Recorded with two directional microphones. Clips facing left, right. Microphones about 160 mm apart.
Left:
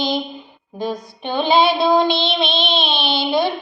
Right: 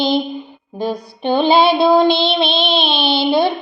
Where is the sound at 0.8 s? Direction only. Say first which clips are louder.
Right 3 dB; 30° right (ahead or behind).